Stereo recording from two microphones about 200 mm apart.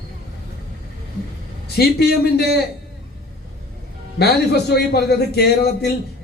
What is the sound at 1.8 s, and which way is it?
Speech, 55° left (ahead or behind).